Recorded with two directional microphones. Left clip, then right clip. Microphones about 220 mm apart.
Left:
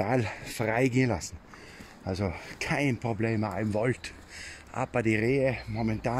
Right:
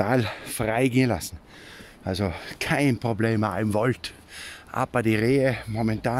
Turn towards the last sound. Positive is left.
turn(degrees=-25)  # may be behind; listen again after turning